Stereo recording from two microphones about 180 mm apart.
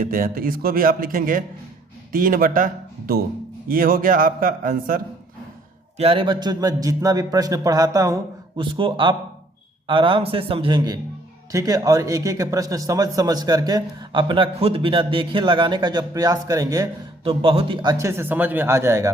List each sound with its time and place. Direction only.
0.0 s a man's voice: 50° right (ahead or behind)
3.7 s a man's voice: 50° right (ahead or behind)
6.0 s speech: 30° right (ahead or behind)
17.2 s speech: 30° right (ahead or behind)
17.9 s speech: 15° right (ahead or behind)